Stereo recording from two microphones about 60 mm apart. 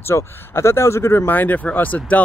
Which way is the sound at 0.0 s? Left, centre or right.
Left.